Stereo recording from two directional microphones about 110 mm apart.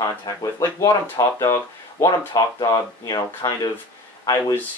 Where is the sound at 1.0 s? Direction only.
25° left (ahead or behind).